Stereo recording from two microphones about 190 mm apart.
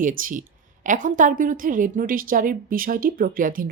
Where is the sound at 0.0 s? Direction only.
45° right (ahead or behind).